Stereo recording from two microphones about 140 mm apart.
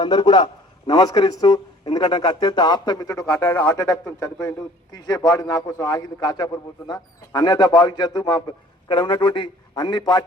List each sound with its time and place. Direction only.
0.0 s speech: 35° left (ahead or behind); by 3.8 s 15° left (ahead or behind)
3.8 s a man's voice: 25° left (ahead or behind)